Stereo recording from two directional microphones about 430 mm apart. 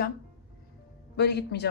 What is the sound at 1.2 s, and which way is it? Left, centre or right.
Speech, left.